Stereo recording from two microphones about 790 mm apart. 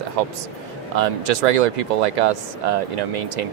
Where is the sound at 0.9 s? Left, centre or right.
Right.